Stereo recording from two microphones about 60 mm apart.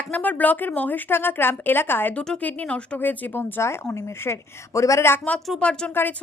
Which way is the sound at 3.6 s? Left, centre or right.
Left.